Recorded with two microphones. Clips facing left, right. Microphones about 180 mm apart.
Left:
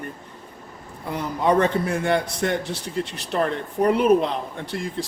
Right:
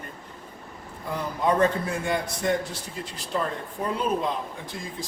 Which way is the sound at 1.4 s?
75° left (ahead or behind).